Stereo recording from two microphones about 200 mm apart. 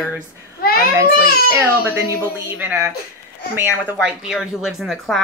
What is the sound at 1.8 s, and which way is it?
A woman's voice, 15° right (ahead or behind).